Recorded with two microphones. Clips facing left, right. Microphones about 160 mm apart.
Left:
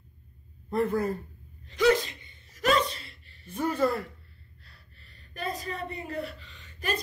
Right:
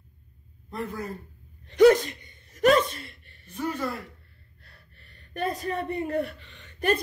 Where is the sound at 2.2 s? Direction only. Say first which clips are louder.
Right 7 dB; 50° right (ahead or behind).